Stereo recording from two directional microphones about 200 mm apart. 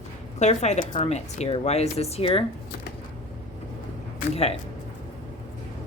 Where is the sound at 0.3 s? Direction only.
35° left (ahead or behind).